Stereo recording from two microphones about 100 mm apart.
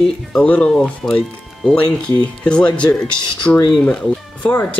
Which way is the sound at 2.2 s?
10° left (ahead or behind).